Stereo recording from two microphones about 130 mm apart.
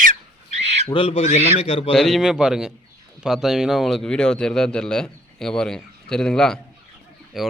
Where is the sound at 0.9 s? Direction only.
45° left (ahead or behind).